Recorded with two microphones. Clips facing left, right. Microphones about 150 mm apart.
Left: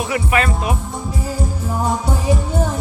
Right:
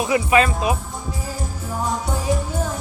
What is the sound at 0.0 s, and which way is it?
Speech, 20° right (ahead or behind).